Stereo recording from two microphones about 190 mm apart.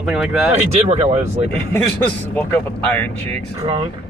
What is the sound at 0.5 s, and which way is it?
Speech, 35° right (ahead or behind).